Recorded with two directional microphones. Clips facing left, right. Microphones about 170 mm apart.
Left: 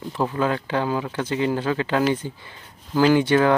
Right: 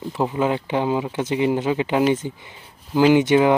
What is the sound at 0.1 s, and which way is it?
Speech, 15° right (ahead or behind).